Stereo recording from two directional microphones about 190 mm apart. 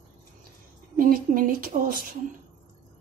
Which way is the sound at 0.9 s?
45° right (ahead or behind).